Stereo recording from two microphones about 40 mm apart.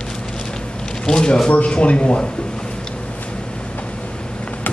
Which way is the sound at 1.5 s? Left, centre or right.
Left.